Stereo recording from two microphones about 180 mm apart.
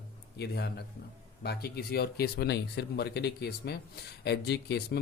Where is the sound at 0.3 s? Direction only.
65° left (ahead or behind).